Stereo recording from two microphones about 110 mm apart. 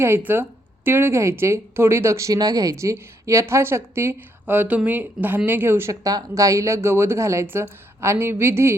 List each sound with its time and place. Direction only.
0.3 s speech: 20° right (ahead or behind)